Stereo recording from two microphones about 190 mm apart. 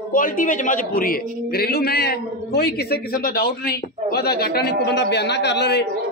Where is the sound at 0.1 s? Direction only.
45° left (ahead or behind).